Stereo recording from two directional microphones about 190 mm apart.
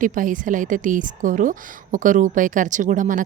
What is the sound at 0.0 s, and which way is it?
A woman's voice, 45° right (ahead or behind).